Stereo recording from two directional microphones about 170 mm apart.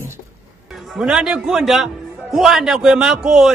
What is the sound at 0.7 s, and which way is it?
A man's voice, centre (ahead or behind).